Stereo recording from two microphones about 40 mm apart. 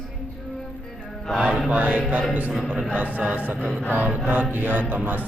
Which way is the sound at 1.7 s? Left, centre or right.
Right.